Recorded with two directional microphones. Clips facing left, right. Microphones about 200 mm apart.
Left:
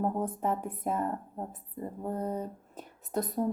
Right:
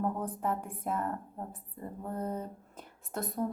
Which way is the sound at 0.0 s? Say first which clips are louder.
Left 3 dB; 20° left (ahead or behind).